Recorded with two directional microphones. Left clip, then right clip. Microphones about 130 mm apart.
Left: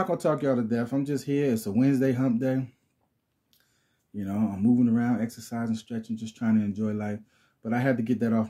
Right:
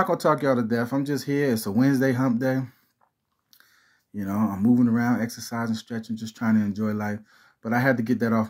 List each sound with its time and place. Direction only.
0.0 s speech: 20° left (ahead or behind)
4.1 s speech: 20° left (ahead or behind)